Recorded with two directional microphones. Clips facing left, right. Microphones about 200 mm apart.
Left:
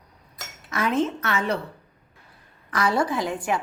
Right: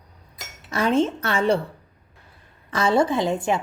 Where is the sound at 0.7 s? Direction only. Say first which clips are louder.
Right 3 dB; 30° right (ahead or behind).